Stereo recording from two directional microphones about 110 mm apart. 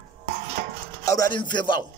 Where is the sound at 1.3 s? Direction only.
45° left (ahead or behind).